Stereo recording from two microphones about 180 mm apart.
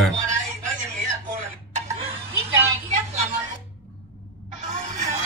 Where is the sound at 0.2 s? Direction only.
45° right (ahead or behind).